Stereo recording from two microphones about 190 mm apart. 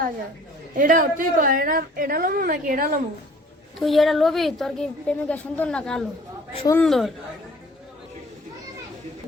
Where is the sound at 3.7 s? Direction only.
Centre (ahead or behind).